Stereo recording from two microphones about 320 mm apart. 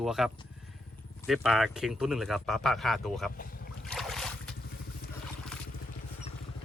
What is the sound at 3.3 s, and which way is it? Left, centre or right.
Boat, left.